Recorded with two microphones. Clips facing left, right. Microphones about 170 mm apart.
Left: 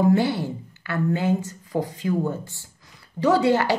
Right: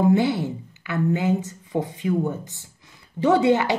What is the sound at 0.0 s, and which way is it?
A woman's voice, 20° right (ahead or behind).